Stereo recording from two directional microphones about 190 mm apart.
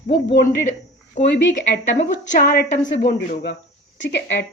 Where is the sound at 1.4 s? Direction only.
70° left (ahead or behind).